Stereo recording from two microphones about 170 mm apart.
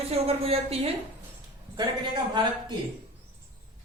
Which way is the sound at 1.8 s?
25° right (ahead or behind).